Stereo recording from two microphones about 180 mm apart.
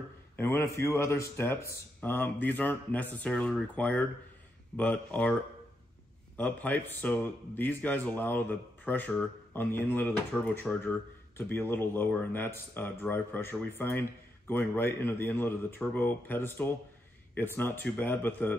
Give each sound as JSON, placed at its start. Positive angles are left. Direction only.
{"t": 0.4, "sound": "a man's voice", "side_deg": 15}